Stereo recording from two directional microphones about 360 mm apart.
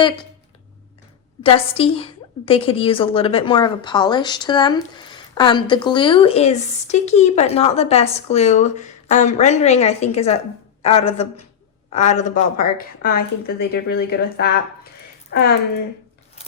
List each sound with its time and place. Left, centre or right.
1.4 s a woman's voice: centre